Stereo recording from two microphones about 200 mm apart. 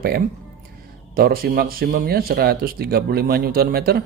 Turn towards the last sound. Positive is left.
turn(degrees=-50)  # may be behind; listen again after turning